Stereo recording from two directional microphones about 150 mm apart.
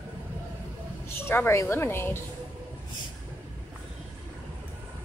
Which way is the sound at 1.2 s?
15° left (ahead or behind).